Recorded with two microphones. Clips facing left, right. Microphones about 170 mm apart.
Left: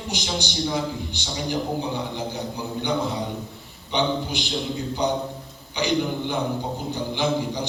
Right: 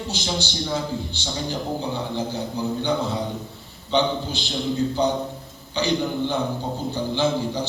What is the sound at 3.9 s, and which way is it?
Speech, 15° left (ahead or behind).